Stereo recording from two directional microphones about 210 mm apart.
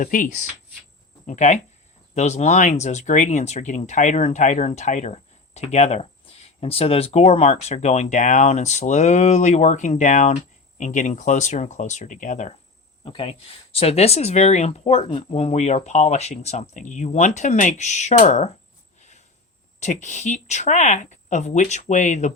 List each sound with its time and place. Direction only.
0.0 s speech: 40° left (ahead or behind)
18.9 s a sound: 35° left (ahead or behind)
19.8 s speech: 35° left (ahead or behind)